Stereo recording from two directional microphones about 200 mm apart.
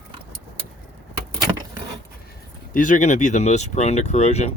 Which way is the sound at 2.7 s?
40° left (ahead or behind).